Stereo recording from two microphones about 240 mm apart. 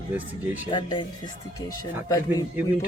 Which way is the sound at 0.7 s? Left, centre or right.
Centre.